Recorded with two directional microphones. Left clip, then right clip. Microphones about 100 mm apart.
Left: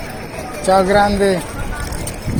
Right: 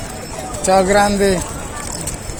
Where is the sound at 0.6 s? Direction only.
55° right (ahead or behind).